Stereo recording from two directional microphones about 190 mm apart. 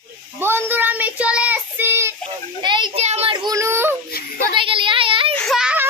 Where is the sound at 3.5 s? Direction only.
15° right (ahead or behind).